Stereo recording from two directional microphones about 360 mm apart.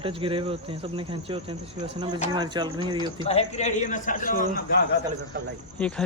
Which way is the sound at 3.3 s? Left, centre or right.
Centre.